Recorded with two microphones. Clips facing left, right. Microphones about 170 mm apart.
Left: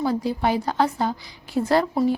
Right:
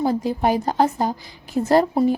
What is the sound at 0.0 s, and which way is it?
A woman's voice, 45° right (ahead or behind).